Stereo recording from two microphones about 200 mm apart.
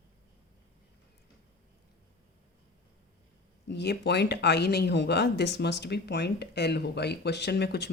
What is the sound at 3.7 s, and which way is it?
Speech, 55° left (ahead or behind).